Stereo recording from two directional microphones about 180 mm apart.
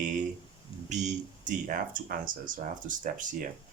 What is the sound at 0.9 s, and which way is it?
Speech, 40° right (ahead or behind).